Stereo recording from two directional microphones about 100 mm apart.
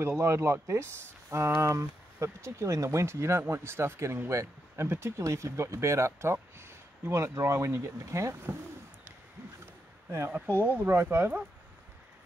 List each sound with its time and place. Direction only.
0.0 s speech: 25° right (ahead or behind)
10.6 s speech: 20° right (ahead or behind)